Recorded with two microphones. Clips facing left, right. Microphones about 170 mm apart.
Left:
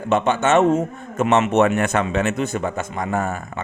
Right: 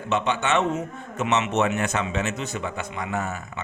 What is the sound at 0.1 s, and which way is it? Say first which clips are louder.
A man's voice: left 6 dB; 45° left (ahead or behind).